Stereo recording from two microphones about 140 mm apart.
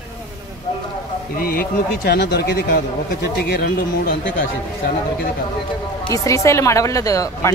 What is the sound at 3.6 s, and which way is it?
Speech, 90° left.